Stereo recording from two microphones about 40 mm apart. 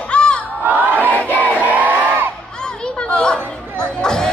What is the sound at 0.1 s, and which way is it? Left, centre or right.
Crowd, left.